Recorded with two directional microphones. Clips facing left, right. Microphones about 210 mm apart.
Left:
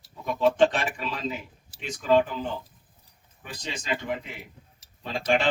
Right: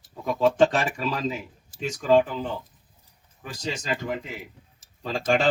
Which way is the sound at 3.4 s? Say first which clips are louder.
Right 5 dB; 40° right (ahead or behind).